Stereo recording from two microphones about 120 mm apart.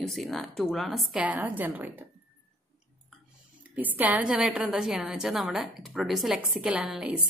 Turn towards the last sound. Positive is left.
turn(degrees=-5)  # may be behind; listen again after turning